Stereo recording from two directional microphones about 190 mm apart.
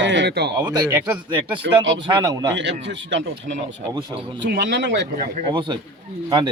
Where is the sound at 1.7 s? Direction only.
70° right (ahead or behind).